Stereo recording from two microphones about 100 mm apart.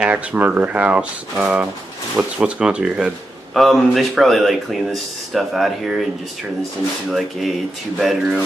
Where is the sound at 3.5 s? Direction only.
Centre (ahead or behind).